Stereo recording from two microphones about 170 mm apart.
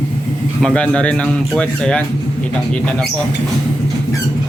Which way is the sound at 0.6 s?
5° left (ahead or behind).